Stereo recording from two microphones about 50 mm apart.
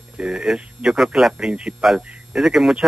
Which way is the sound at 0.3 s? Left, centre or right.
Centre.